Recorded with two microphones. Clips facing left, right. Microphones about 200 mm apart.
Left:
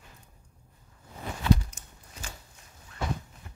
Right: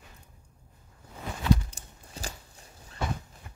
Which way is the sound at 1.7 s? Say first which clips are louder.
Right 2 dB; 35° right (ahead or behind).